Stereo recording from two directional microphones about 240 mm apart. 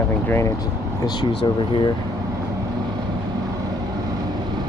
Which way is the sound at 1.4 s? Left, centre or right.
Left.